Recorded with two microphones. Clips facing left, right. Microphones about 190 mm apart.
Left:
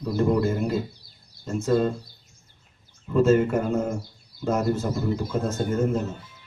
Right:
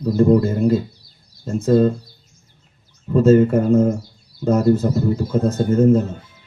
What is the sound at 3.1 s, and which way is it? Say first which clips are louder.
Speech: right 6 dB; 35° right (ahead or behind).